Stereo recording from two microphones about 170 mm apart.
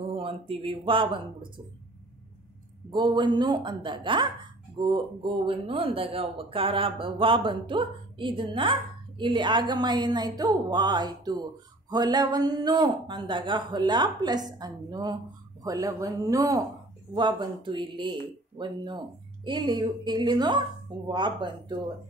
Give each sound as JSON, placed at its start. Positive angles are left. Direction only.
{"t": 0.1, "sound": "speech", "side_deg": -30}
{"t": 2.9, "sound": "a man's voice", "side_deg": -25}